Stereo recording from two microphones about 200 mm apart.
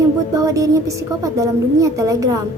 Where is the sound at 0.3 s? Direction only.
15° right (ahead or behind).